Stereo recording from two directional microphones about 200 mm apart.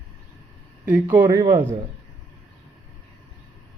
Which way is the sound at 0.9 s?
10° right (ahead or behind).